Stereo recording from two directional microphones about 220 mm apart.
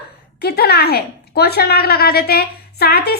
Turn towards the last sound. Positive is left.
turn(degrees=45)  # may be behind; listen again after turning